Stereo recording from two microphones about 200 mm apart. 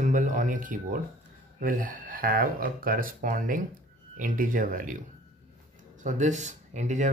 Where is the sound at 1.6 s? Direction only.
45° right (ahead or behind).